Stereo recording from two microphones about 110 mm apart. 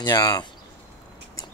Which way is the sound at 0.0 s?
35° left (ahead or behind).